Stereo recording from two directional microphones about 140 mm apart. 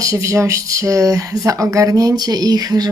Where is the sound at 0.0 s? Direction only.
20° right (ahead or behind).